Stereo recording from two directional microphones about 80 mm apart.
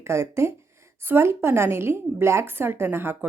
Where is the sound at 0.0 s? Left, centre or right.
Right.